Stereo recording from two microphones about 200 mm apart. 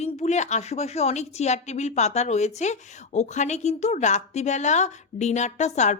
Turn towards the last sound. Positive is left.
turn(degrees=35)  # may be behind; listen again after turning